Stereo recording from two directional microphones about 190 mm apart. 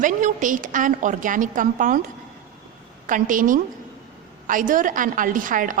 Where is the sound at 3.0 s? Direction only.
45° right (ahead or behind).